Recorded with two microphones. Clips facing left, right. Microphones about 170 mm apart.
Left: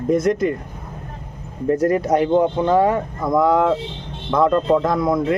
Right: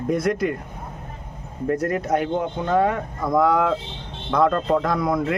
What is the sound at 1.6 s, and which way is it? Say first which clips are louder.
Speech: left 5 dB; 30° left (ahead or behind).